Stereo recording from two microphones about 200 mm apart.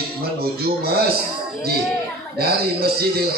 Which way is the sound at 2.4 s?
50° right (ahead or behind).